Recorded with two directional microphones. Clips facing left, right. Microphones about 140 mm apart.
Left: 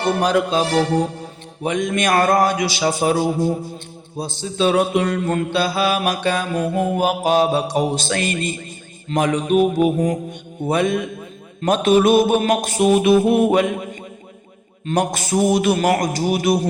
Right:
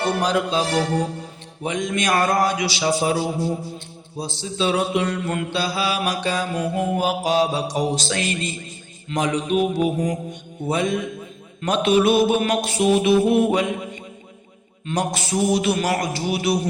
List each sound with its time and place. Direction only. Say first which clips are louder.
0.2 s mantra: left 3 dB; 55° left (ahead or behind)
1.6 s mantra: left 3 dB; 55° left (ahead or behind)
10.7 s a man's voice: left 3 dB; 60° left (ahead or behind)
11.6 s mantra: left 3 dB; 45° left (ahead or behind)